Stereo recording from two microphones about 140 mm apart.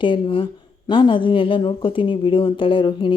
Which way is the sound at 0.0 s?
40° left (ahead or behind).